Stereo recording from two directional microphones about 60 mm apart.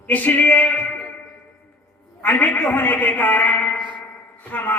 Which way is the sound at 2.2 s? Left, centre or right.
Left.